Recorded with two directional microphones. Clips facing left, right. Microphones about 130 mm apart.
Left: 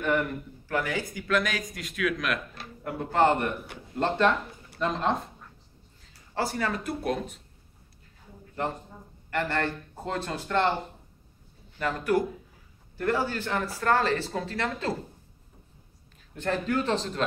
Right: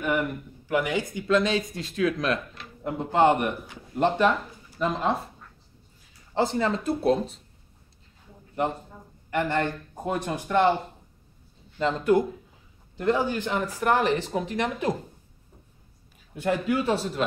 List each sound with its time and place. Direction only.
0.0 s speech: 15° right (ahead or behind)
6.3 s speech: 20° right (ahead or behind)
8.6 s speech: 15° right (ahead or behind)
11.8 s speech: 20° right (ahead or behind)
16.3 s speech: 10° right (ahead or behind)